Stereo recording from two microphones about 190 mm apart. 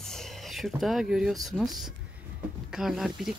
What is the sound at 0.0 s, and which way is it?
Speech, centre (ahead or behind).